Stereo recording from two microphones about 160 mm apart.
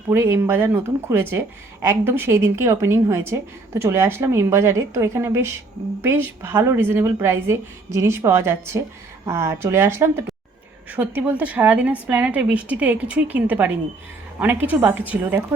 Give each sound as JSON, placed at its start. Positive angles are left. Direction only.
{"t": 0.1, "sound": "speech", "side_deg": -15}